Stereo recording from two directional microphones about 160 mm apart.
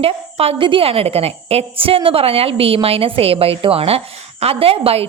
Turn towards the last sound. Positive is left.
turn(degrees=-35)  # may be behind; listen again after turning